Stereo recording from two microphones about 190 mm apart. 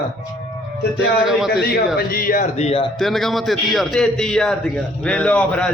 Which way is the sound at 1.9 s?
50° left (ahead or behind).